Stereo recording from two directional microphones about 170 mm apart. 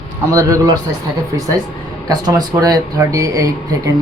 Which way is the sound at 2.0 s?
20° right (ahead or behind).